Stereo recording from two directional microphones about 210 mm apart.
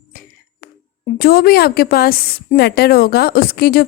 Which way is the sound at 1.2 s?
45° left (ahead or behind).